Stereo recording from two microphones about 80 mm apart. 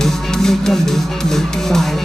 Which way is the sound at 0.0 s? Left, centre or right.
Centre.